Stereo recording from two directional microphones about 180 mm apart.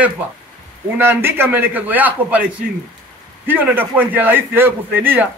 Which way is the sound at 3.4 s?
10° right (ahead or behind).